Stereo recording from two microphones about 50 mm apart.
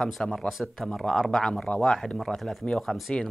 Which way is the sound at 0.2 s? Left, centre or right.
Centre.